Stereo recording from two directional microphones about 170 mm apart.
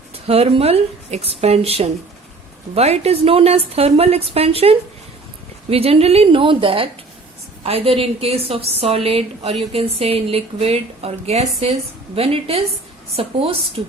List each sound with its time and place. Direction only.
0.3 s a woman's voice: 35° right (ahead or behind)